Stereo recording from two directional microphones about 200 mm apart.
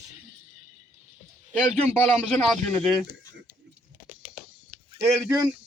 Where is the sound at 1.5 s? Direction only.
10° left (ahead or behind).